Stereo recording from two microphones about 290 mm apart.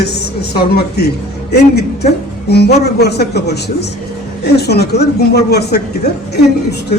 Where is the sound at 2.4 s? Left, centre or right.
Left.